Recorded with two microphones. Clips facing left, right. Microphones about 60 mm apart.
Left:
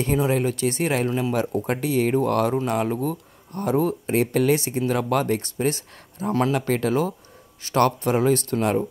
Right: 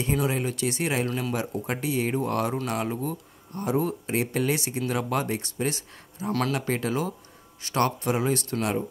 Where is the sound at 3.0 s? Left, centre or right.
Left.